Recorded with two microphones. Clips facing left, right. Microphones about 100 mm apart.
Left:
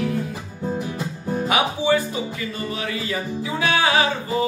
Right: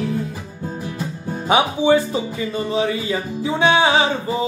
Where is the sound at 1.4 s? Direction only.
25° right (ahead or behind).